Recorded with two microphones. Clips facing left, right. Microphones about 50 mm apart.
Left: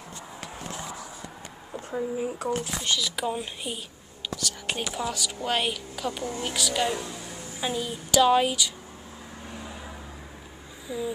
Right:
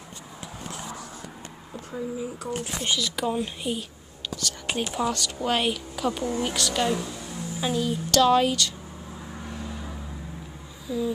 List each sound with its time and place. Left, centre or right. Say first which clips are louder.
1.7 s a sound: left 3 dB; centre
2.1 s speech: left 3 dB; left
3.0 s speech: right 2 dB; centre
7.1 s a sound: right 2 dB; centre
7.6 s speech: right 4 dB; centre
9.5 s vehicle: right 2 dB; centre
10.9 s speech: right 4 dB; centre